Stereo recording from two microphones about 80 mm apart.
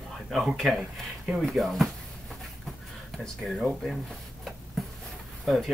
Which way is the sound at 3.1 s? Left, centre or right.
Centre.